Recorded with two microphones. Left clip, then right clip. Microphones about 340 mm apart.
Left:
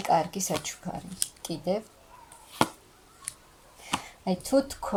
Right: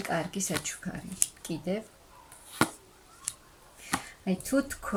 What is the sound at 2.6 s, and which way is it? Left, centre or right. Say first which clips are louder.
Chop: left 2 dB; centre.